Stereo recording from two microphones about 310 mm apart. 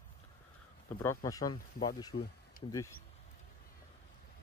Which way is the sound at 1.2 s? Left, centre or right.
Centre.